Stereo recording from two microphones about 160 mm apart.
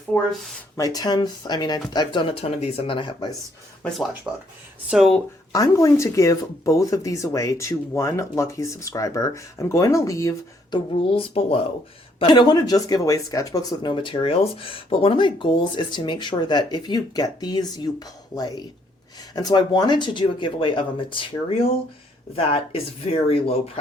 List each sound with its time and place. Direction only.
0.1 s speech: 5° left (ahead or behind)
0.8 s speech: 25° left (ahead or behind)
2.4 s speech: 40° left (ahead or behind)
4.3 s speech: 5° right (ahead or behind)
5.5 s speech: 20° left (ahead or behind)
11.1 s speech: 35° left (ahead or behind)